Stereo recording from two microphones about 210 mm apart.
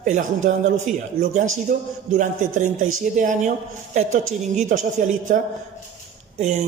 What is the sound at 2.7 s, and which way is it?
Speech, 80° right.